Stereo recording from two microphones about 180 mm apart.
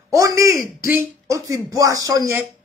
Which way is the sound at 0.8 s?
15° right (ahead or behind).